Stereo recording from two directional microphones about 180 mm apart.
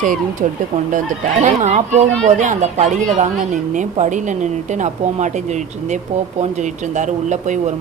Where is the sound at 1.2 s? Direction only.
40° right (ahead or behind).